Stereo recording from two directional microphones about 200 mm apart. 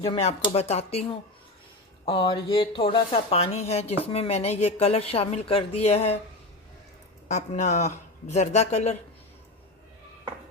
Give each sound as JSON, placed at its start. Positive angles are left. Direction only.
{"t": 0.0, "sound": "speech", "side_deg": 30}
{"t": 2.0, "sound": "speech", "side_deg": 25}
{"t": 7.3, "sound": "speech", "side_deg": 35}